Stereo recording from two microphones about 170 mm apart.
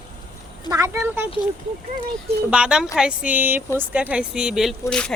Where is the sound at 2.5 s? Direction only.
5° right (ahead or behind).